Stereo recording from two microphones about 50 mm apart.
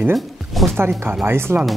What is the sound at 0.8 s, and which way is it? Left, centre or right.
Speech, right.